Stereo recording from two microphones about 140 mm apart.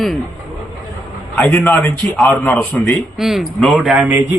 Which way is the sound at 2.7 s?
Centre (ahead or behind).